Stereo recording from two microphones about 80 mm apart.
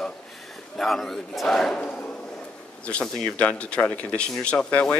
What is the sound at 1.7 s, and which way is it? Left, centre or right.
Speech, centre.